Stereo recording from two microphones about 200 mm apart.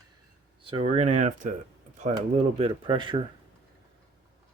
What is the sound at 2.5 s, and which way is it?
Speech, 25° right (ahead or behind).